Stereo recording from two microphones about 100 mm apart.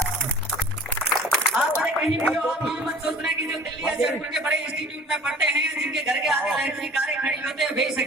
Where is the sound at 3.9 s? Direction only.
5° right (ahead or behind).